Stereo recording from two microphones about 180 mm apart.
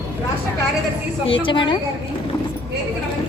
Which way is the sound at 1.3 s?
30° left (ahead or behind).